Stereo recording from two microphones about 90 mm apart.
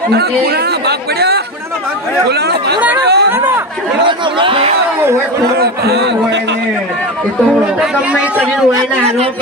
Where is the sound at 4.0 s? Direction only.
70° right (ahead or behind).